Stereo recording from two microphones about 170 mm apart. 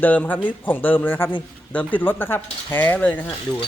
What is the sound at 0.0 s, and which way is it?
Speech, 10° left (ahead or behind).